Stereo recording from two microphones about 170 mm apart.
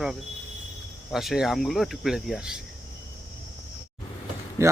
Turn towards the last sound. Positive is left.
turn(degrees=-15)  # may be behind; listen again after turning